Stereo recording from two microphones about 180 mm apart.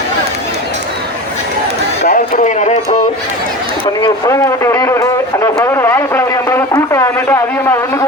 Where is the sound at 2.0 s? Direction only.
45° left (ahead or behind).